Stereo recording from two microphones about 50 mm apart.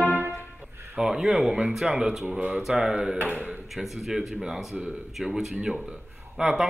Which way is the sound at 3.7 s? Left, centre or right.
Centre.